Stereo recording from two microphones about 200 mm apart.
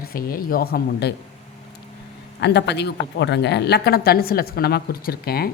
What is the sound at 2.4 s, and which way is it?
A woman's voice, 55° left (ahead or behind).